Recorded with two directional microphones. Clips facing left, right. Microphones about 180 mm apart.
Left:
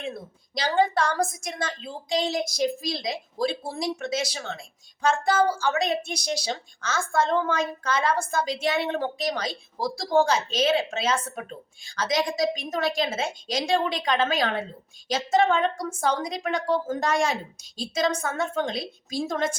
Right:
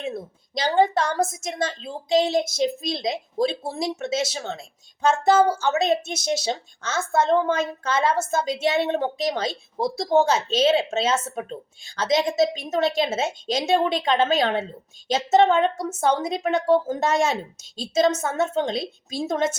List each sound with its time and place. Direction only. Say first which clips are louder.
0.5 s speech: right 3 dB; 25° right (ahead or behind)